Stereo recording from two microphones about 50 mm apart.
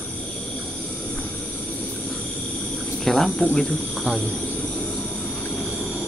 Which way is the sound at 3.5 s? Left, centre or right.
Centre.